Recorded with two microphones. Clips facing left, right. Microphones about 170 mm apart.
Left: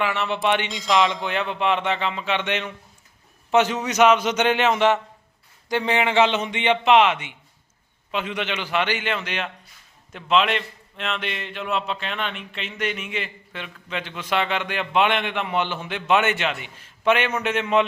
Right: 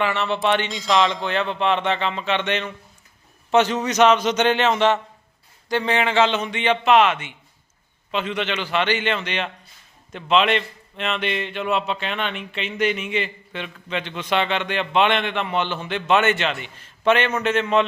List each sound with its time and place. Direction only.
0.0 s a man's voice: 10° left (ahead or behind)
0.7 s a man's voice: centre (ahead or behind)